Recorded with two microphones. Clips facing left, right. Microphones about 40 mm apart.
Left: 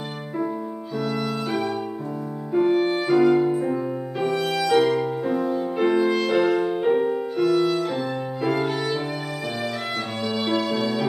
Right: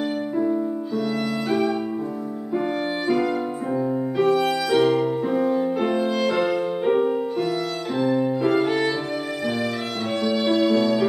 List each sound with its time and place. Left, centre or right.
2.6 s music: centre
4.6 s music: centre
5.8 s music: centre
6.9 s music: centre
7.3 s music: centre
10.5 s music: centre